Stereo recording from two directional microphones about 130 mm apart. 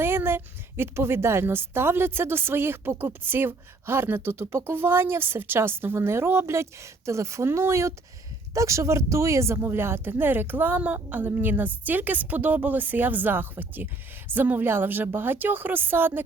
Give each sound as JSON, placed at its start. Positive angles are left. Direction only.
{"t": 0.0, "sound": "a woman's voice", "side_deg": -20}